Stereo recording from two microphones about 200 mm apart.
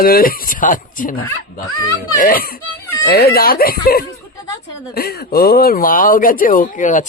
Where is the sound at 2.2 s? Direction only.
45° left (ahead or behind).